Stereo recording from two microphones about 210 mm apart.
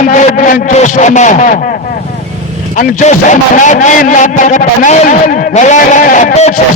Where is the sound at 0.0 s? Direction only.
35° left (ahead or behind).